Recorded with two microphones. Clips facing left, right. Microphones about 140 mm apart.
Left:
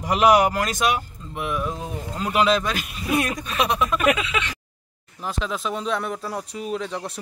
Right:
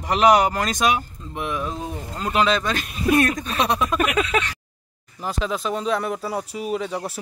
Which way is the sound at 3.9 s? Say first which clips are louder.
Right 1 dB; 45° right (ahead or behind).